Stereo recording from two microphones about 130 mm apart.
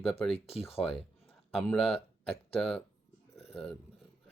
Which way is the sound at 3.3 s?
50° left (ahead or behind).